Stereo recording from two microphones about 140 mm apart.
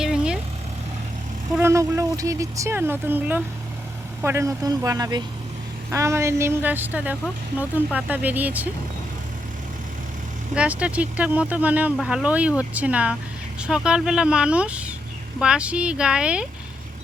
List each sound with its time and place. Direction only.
0.0 s vehicle: 5° right (ahead or behind)
1.5 s speech: 20° right (ahead or behind)
10.5 s speech: 10° right (ahead or behind)